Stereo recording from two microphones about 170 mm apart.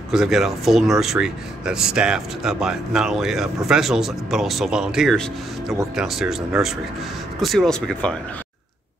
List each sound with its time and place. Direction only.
0.1 s speech: 5° right (ahead or behind)